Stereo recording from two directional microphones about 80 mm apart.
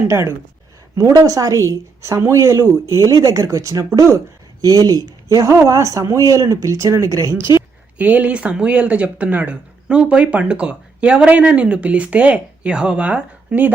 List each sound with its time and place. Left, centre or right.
0.1 s a woman's voice: right
7.9 s speech: centre